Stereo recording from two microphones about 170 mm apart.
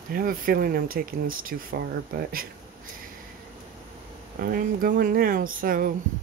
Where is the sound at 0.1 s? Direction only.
55° right (ahead or behind).